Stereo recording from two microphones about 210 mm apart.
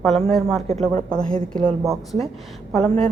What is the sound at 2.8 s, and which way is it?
Speech, 5° left (ahead or behind).